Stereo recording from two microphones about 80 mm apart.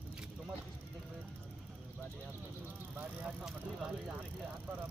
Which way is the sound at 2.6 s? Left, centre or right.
Right.